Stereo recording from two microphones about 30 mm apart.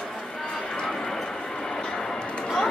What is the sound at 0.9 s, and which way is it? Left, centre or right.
Vehicle, centre.